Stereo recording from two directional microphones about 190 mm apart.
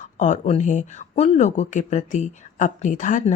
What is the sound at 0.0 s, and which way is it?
A woman's voice, 40° left (ahead or behind).